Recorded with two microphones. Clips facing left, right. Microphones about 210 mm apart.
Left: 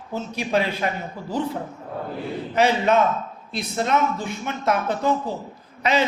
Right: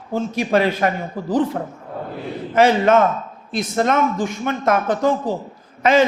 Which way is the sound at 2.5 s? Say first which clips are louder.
Right 5 dB; 50° right (ahead or behind).